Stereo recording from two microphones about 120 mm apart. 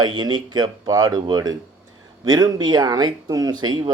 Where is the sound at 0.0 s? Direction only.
40° right (ahead or behind).